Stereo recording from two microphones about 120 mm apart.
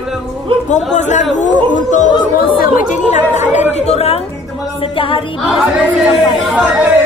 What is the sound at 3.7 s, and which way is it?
Speech, 60° left (ahead or behind).